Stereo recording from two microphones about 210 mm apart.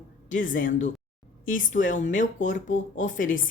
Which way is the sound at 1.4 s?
40° left (ahead or behind).